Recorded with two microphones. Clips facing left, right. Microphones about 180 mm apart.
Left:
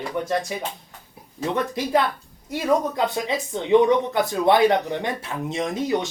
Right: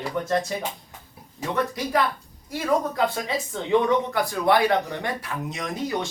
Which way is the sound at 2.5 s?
20° left (ahead or behind).